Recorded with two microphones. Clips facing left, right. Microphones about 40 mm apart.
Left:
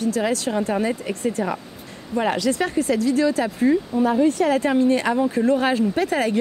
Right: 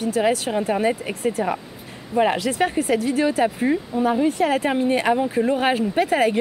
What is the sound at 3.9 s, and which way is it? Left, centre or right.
Speech, centre.